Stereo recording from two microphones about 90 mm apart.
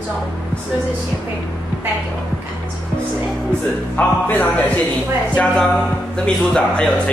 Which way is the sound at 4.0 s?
15° left (ahead or behind).